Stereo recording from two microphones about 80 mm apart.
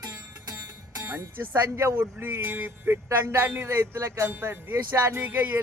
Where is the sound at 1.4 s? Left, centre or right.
Right.